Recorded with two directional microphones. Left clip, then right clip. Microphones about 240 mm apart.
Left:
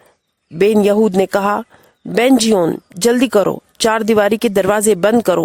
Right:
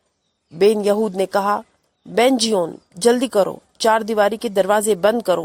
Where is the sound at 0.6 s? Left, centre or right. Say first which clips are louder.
Left 4 dB; left.